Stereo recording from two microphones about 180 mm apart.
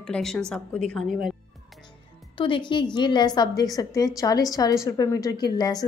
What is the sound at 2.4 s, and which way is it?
A woman's voice, 25° left (ahead or behind).